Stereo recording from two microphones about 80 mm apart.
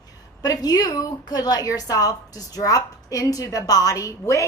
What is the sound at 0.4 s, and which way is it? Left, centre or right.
A woman's voice, left.